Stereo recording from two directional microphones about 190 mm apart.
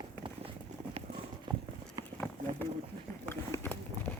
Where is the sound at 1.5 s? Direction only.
25° right (ahead or behind).